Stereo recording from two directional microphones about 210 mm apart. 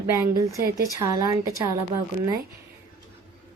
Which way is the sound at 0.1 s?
15° right (ahead or behind).